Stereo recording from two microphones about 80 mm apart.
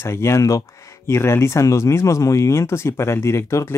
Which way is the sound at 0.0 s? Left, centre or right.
Left.